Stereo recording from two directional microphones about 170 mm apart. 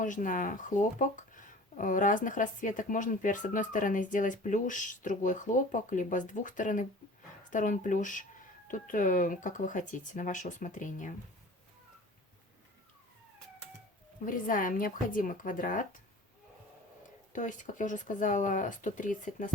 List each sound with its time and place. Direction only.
0.0 s speech: 50° left (ahead or behind)
14.3 s speech: 55° left (ahead or behind)
17.3 s speech: 45° left (ahead or behind)